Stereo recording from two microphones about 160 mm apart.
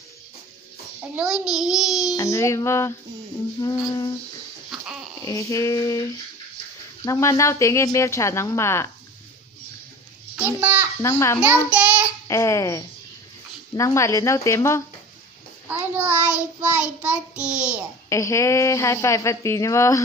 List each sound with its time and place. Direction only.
1.1 s a child's voice: 5° right (ahead or behind)
2.1 s a woman's voice: 20° left (ahead or behind)
4.6 s a sound: 5° right (ahead or behind)
5.2 s a woman's voice: 20° left (ahead or behind)
7.1 s speech: 20° left (ahead or behind)
10.3 s a sound: 10° right (ahead or behind)
11.0 s speech: 15° left (ahead or behind)
11.7 s child singing: 10° right (ahead or behind)
12.3 s a woman's voice: 20° left (ahead or behind)
15.8 s child singing: 10° right (ahead or behind)
18.1 s a woman's voice: 20° left (ahead or behind)